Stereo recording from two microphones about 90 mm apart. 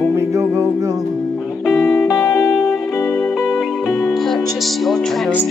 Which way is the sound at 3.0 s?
15° left (ahead or behind).